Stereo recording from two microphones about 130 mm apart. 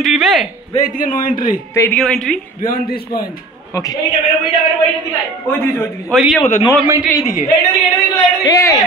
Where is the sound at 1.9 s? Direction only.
5° left (ahead or behind).